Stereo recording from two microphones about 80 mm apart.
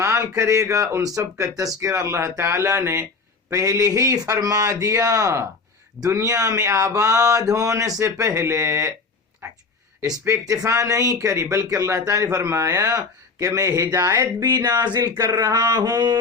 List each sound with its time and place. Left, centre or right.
0.0 s speech: right